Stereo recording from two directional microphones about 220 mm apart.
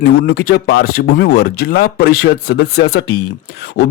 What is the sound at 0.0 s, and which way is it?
Speech, 45° left (ahead or behind).